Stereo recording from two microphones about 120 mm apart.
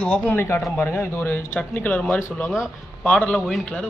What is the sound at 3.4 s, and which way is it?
Speech, centre (ahead or behind).